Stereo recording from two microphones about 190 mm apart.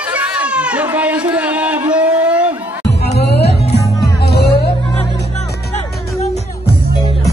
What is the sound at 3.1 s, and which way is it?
Music, 60° left (ahead or behind).